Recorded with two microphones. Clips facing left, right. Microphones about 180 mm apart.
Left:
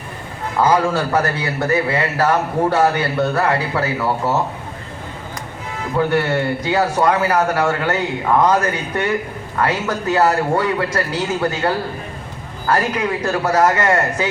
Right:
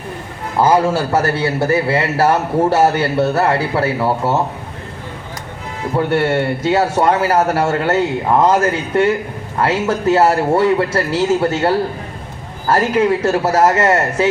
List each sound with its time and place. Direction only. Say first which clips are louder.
0.6 s a man's voice: right 3 dB; 25° right (ahead or behind)
6.1 s a man's voice: right 4 dB; 25° right (ahead or behind)